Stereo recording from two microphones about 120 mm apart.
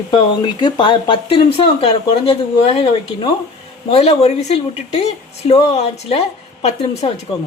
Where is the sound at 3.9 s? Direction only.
60° left (ahead or behind).